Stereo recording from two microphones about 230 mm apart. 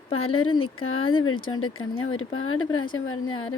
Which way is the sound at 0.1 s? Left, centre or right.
Left.